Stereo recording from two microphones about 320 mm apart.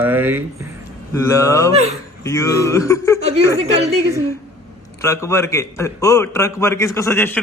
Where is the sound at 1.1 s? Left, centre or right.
Centre.